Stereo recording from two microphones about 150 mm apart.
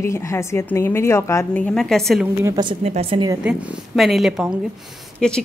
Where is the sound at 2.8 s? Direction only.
45° right (ahead or behind).